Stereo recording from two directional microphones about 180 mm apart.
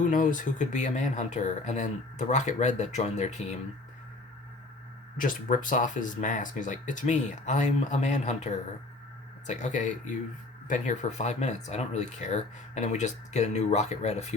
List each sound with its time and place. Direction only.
0.0 s speech: 45° left (ahead or behind)
5.1 s speech: 50° left (ahead or behind)